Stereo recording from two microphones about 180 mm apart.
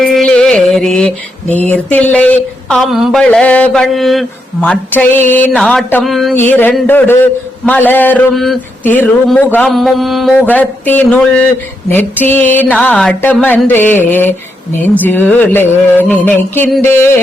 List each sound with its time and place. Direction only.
0.0 s music: 5° left (ahead or behind)
1.5 s a man's voice: 10° left (ahead or behind)
5.5 s a sound: 5° left (ahead or behind)
6.3 s a man's voice: 10° left (ahead or behind)